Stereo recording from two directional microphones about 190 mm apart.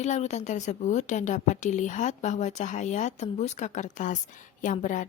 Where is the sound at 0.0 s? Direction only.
35° left (ahead or behind).